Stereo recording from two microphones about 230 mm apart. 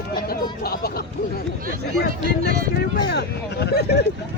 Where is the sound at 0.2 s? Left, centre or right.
Left.